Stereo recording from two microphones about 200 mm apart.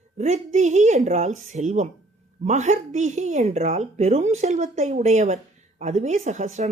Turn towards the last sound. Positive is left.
turn(degrees=-35)  # may be behind; listen again after turning